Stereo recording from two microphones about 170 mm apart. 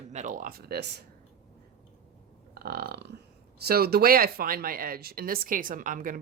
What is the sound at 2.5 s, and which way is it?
Burping, 65° right (ahead or behind).